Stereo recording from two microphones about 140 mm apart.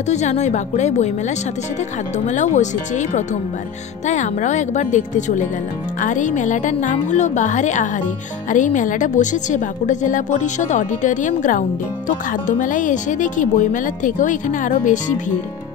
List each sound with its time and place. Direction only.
0.1 s a woman's voice: 55° left (ahead or behind)
2.1 s a woman's voice: 60° left (ahead or behind)